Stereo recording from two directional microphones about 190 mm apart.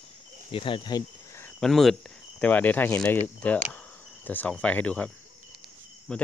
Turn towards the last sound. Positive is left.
turn(degrees=5)  # may be behind; listen again after turning